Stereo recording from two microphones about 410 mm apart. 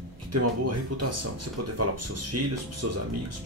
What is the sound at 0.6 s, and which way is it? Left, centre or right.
A man's voice, right.